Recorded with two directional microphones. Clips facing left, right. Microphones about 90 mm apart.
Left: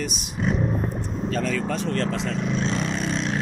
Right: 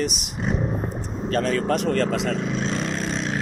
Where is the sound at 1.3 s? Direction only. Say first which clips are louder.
Right 5 dB; 65° right (ahead or behind); by 2.4 s 90° right.